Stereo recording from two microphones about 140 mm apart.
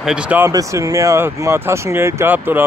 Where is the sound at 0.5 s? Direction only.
25° right (ahead or behind).